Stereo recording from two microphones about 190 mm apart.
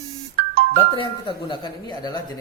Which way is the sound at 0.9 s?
25° left (ahead or behind).